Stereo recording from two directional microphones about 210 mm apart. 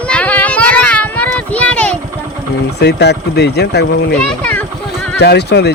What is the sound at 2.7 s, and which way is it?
Speech, 50° left (ahead or behind).